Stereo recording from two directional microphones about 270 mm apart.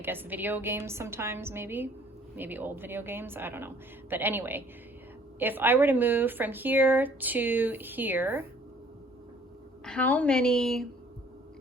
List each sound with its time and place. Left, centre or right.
0.0 s speech: centre
9.8 s a woman's voice: centre